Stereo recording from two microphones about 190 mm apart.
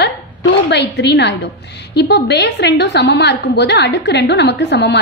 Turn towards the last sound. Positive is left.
turn(degrees=60)  # may be behind; listen again after turning